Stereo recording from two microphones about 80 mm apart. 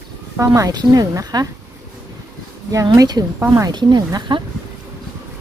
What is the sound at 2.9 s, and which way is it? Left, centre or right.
Speech, right.